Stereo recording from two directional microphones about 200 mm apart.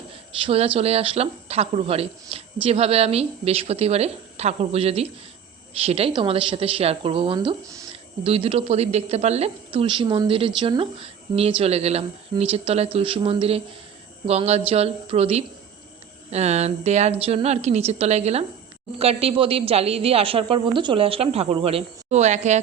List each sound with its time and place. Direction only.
0.1 s a woman's voice: 30° right (ahead or behind)